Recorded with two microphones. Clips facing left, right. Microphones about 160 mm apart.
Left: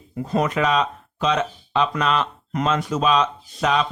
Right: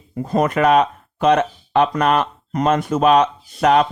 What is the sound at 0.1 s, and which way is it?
Speech, 45° right (ahead or behind).